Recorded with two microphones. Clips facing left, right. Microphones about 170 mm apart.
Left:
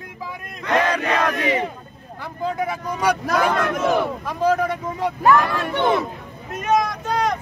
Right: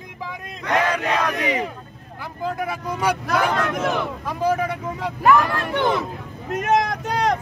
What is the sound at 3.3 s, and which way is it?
Speech, 35° left (ahead or behind).